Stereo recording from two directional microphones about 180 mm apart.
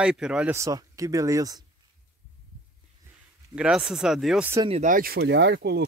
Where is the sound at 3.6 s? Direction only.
5° right (ahead or behind).